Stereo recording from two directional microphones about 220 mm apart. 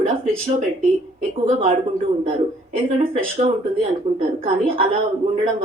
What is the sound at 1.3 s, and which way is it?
Speech, 35° right (ahead or behind).